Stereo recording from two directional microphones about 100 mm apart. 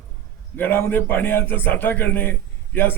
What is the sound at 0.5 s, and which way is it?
A man's voice, 20° left (ahead or behind).